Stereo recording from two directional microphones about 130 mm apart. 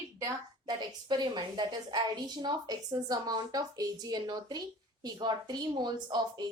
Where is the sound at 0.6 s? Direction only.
35° right (ahead or behind).